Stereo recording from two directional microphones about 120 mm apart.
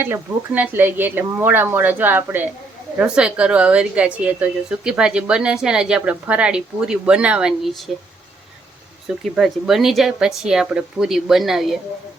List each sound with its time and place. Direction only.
0.0 s a woman's voice: 15° right (ahead or behind)
9.3 s speech: centre (ahead or behind)